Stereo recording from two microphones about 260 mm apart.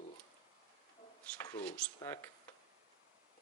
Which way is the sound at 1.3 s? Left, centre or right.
Centre.